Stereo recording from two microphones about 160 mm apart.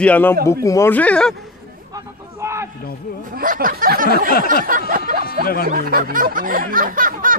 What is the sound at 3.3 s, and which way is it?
Speech, 65° right (ahead or behind).